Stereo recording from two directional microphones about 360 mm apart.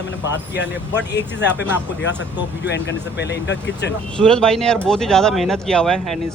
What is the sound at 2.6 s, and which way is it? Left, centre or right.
Speech, left.